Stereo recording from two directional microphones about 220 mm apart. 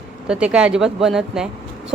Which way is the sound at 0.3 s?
5° right (ahead or behind).